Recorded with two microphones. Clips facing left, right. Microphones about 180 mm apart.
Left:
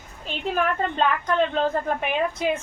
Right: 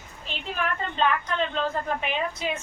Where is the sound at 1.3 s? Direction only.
50° left (ahead or behind).